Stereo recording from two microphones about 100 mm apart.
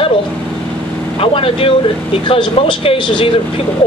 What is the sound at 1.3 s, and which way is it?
Speech, 65° left (ahead or behind).